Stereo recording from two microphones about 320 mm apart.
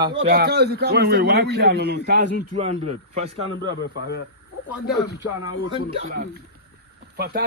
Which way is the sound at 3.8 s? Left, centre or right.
Left.